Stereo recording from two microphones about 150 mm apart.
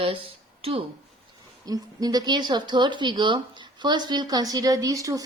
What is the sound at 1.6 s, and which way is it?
Speech, 25° right (ahead or behind).